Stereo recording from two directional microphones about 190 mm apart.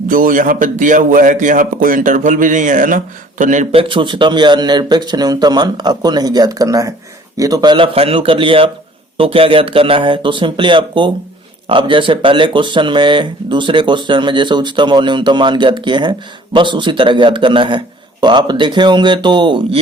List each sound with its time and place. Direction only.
0.1 s speech: 45° right (ahead or behind); by 19.8 s 25° right (ahead or behind)